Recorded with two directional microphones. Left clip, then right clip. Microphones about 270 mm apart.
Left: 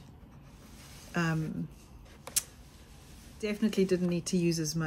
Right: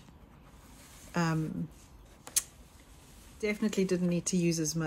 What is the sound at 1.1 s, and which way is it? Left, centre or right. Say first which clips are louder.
Speech: even; centre.